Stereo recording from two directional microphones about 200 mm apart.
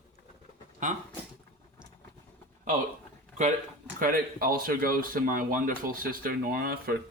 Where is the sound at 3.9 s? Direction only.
45° right (ahead or behind).